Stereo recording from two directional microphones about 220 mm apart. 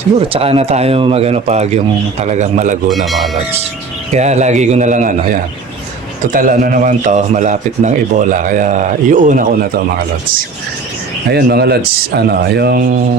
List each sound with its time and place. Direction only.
0.3 s speech: 25° right (ahead or behind)
2.9 s speech: centre (ahead or behind)
4.1 s a man's voice: 30° right (ahead or behind)
11.3 s speech: 45° right (ahead or behind)